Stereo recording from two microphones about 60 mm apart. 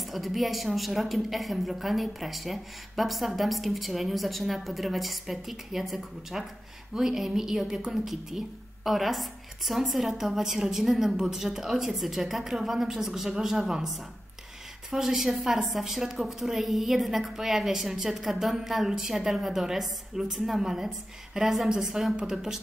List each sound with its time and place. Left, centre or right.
0.0 s a woman's voice: centre
14.9 s a woman's voice: centre